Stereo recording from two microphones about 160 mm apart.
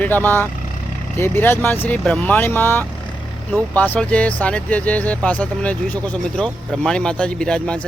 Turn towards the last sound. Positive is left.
turn(degrees=5)  # may be behind; listen again after turning